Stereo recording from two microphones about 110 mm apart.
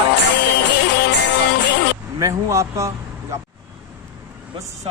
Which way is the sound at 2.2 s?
30° right (ahead or behind).